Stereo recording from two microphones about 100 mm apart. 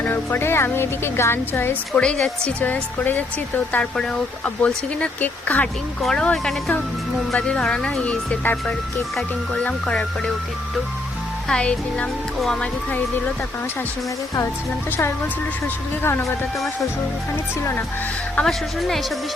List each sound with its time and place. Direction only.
0.0 s speech: 20° left (ahead or behind)
1.9 s speech: 10° left (ahead or behind)
11.4 s speech: 10° left (ahead or behind)
12.9 s speech: 15° left (ahead or behind)
18.3 s speech: 5° left (ahead or behind)